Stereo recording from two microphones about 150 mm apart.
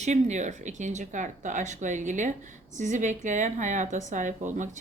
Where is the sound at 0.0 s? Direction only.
50° right (ahead or behind).